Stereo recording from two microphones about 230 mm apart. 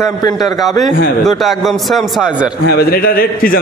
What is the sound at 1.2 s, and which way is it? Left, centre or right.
A man's voice, centre.